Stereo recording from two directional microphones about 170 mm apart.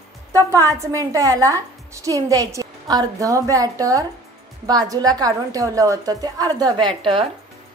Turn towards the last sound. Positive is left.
turn(degrees=-30)  # may be behind; listen again after turning